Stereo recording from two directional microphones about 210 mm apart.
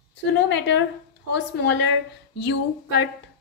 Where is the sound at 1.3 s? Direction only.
55° left (ahead or behind).